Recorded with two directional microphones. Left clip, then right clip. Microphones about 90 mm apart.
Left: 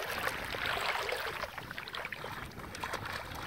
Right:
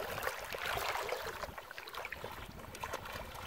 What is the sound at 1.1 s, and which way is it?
Boat, 20° left (ahead or behind).